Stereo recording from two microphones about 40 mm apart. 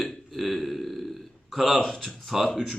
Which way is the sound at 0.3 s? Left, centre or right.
Centre.